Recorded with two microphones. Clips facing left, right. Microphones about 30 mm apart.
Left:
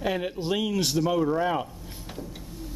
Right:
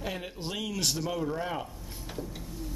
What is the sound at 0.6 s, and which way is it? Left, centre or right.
Speech, centre.